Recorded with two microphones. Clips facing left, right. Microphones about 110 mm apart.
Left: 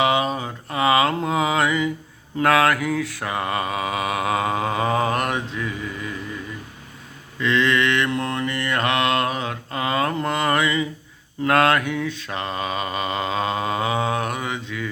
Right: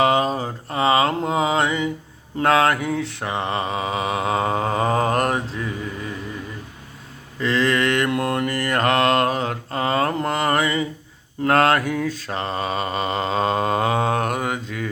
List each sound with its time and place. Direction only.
0.0 s mantra: 40° right (ahead or behind)
7.3 s mantra: 35° right (ahead or behind)